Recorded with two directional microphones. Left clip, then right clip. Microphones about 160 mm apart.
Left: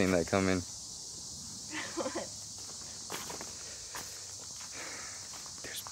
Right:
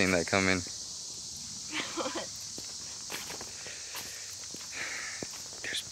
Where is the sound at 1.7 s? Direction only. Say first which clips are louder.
Right 2 dB; 25° right (ahead or behind).